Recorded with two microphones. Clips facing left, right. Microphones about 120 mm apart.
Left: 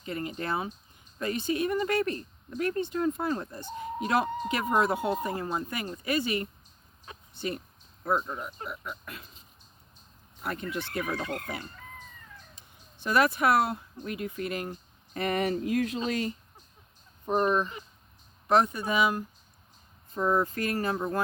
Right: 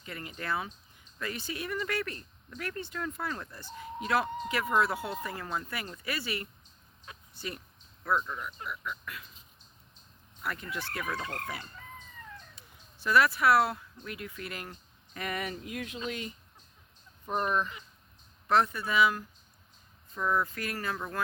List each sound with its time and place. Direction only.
0.0 s speech: 30° left (ahead or behind)
7.0 s a sound: 30° left (ahead or behind)
8.0 s speech: 30° left (ahead or behind)
10.4 s speech: 25° left (ahead or behind)
12.5 s speech: 20° left (ahead or behind)
15.1 s speech: 35° left (ahead or behind)
17.2 s speech: 25° left (ahead or behind)